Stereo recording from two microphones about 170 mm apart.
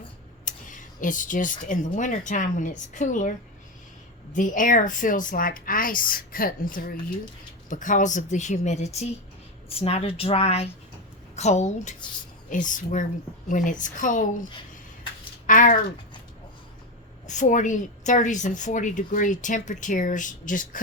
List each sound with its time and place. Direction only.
0.4 s a woman's voice: 50° left (ahead or behind)
15.4 s speech: 50° left (ahead or behind)
17.2 s a woman's voice: 45° left (ahead or behind)